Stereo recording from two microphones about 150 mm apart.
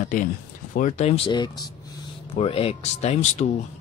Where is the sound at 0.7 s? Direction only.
55° left (ahead or behind); by 1.6 s 30° left (ahead or behind).